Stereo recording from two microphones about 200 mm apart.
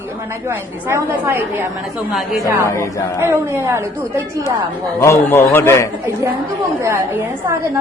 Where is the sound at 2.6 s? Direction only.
15° left (ahead or behind).